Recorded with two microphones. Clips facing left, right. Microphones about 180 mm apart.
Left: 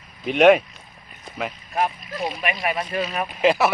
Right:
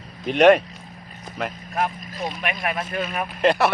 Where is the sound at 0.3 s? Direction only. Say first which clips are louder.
Even; centre (ahead or behind).